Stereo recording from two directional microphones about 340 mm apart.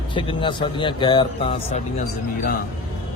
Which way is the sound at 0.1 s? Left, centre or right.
Centre.